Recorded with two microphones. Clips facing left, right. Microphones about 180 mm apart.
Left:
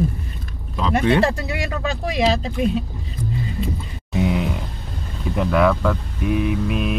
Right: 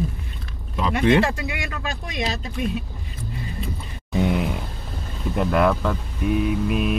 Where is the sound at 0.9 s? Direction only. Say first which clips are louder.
Left 1 dB; 40° left (ahead or behind).